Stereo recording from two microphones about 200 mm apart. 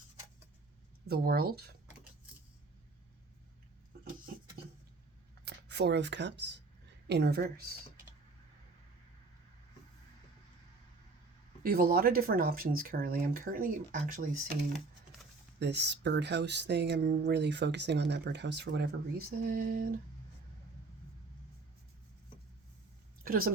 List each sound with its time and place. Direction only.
1.0 s speech: 50° right (ahead or behind)
5.5 s speech: 55° right (ahead or behind)
11.6 s speech: 50° right (ahead or behind)
15.5 s speech: 60° right (ahead or behind)
23.2 s a sound: 45° right (ahead or behind)